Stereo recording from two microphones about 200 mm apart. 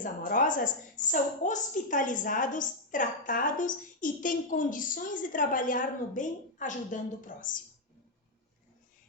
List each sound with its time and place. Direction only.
0.0 s a woman's voice: 40° left (ahead or behind)